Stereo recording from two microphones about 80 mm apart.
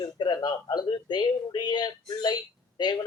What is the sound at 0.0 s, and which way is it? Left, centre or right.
Speech, left.